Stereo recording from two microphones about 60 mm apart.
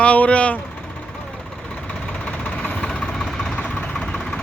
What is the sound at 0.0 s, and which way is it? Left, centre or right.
Speech, left.